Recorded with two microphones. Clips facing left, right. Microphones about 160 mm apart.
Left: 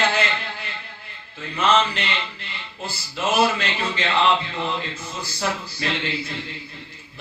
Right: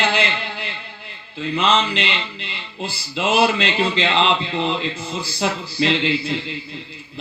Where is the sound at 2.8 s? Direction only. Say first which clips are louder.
Right 3 dB; 70° right (ahead or behind).